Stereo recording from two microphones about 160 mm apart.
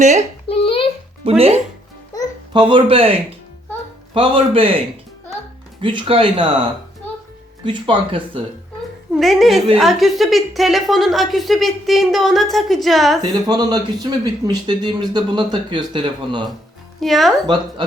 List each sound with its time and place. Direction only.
0.0 s a child's voice: 45° right (ahead or behind)
0.4 s a sound: 35° left (ahead or behind)
1.2 s speech: 40° right (ahead or behind)
5.8 s speech: 30° right (ahead or behind)
7.6 s speech: 30° right (ahead or behind)
9.1 s a woman's voice: centre (ahead or behind)
13.5 s speech: 25° right (ahead or behind)
17.0 s a woman's voice: centre (ahead or behind)
17.4 s speech: 25° right (ahead or behind)